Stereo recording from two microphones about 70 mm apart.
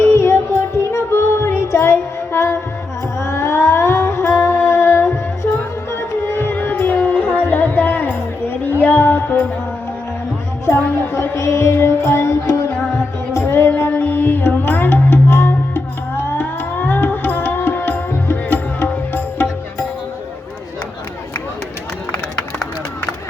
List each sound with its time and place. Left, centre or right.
0.0 s music: left
10.7 s music: left